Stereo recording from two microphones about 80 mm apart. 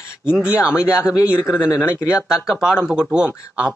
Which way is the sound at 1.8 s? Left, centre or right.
Left.